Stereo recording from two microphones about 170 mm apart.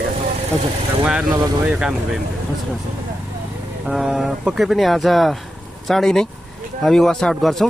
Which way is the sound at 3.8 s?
Centre (ahead or behind).